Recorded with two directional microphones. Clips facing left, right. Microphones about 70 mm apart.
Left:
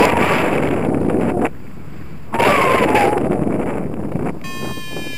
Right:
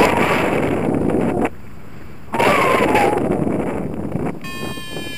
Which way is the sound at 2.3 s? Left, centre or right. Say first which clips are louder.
Left 1 dB; left.